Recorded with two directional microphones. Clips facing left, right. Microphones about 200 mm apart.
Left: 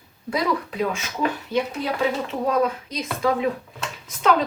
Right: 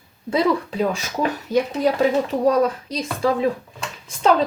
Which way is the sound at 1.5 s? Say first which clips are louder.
Right 5 dB; 40° right (ahead or behind).